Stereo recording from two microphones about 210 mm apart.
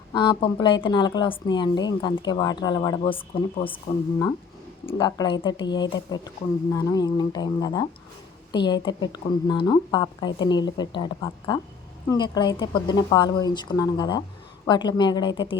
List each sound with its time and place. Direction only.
0.1 s a woman's voice: 20° left (ahead or behind)
4.9 s a woman's voice: 20° left (ahead or behind)